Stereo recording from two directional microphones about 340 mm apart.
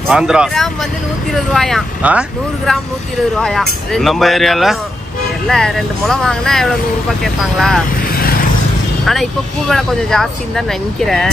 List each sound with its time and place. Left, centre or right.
0.1 s speech: centre
8.2 s vehicle: left
9.0 s speech: centre